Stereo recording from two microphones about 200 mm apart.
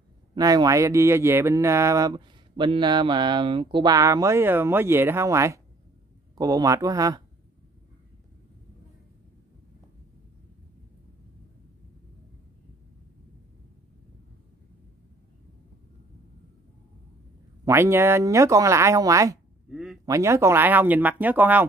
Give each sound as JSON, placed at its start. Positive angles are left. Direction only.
{"t": 0.3, "sound": "speech", "side_deg": -20}
{"t": 17.6, "sound": "speech", "side_deg": -15}
{"t": 19.7, "sound": "speech", "side_deg": 0}
{"t": 20.1, "sound": "speech", "side_deg": -15}